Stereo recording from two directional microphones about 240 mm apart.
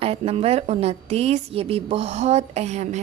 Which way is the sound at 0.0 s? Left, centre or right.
Right.